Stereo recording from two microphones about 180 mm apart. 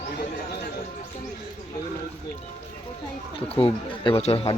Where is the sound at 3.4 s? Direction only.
30° left (ahead or behind).